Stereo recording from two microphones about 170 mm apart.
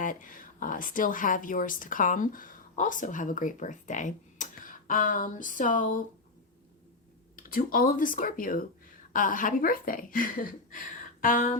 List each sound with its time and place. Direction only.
0.0 s speech: 50° left (ahead or behind)
7.3 s speech: 55° left (ahead or behind)